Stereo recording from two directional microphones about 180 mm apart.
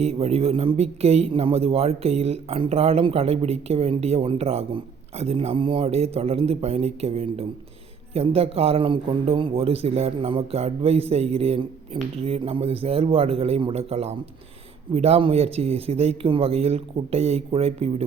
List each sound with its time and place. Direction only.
0.0 s a man's voice: 35° right (ahead or behind)